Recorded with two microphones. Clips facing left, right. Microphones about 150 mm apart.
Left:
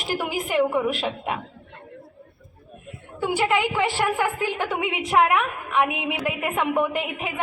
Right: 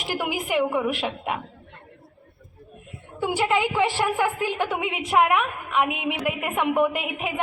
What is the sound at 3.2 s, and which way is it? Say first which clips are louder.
A woman's voice: even; 15° right (ahead or behind).